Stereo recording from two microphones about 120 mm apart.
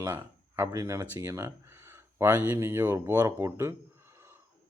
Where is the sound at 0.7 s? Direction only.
30° right (ahead or behind).